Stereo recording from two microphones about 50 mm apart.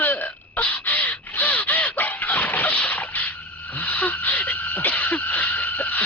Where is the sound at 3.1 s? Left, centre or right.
Left.